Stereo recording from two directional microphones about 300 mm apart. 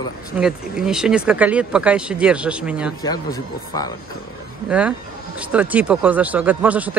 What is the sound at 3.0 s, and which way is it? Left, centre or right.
Speech, centre.